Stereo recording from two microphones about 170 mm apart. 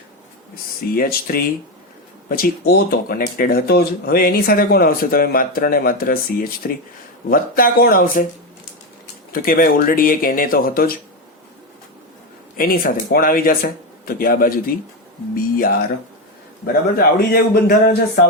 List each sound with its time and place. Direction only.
0.9 s speech: 60° left (ahead or behind)
9.3 s speech: 55° left (ahead or behind)
12.5 s speech: 55° left (ahead or behind)
17.0 s speech: 60° left (ahead or behind)